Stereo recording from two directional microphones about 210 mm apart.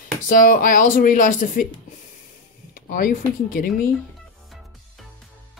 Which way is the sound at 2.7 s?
40° left (ahead or behind).